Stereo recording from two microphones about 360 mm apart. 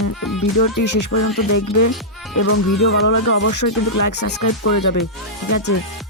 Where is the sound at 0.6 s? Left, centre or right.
Left.